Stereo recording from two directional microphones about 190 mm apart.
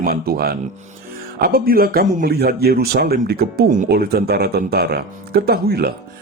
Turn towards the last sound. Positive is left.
turn(degrees=-55)  # may be behind; listen again after turning